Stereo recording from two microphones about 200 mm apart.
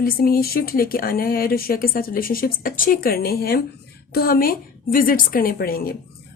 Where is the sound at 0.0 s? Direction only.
50° left (ahead or behind).